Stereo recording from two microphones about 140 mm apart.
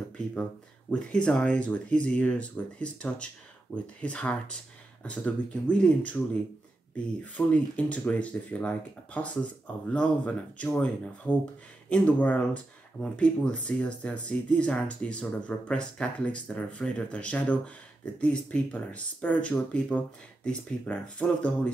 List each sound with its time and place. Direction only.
0.3 s speech: 10° left (ahead or behind)
7.3 s speech: 10° left (ahead or behind)